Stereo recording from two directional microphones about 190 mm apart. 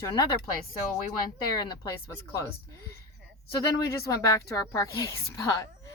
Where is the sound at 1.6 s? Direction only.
20° left (ahead or behind).